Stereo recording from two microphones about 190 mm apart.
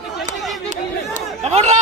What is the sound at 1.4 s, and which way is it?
Speech, 35° right (ahead or behind).